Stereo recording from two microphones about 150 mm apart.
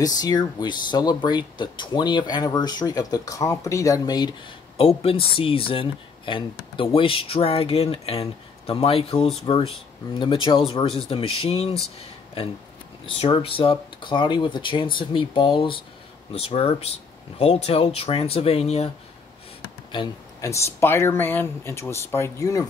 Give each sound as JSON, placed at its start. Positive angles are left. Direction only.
{"t": 0.0, "sound": "speech", "side_deg": 25}
{"t": 13.0, "sound": "speech", "side_deg": 35}
{"t": 20.3, "sound": "speech", "side_deg": 20}